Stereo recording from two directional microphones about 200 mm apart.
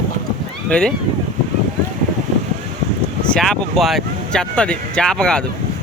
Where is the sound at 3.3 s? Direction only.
Centre (ahead or behind).